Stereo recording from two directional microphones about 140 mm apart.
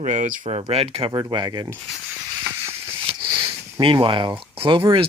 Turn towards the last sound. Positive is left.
turn(degrees=-40)  # may be behind; listen again after turning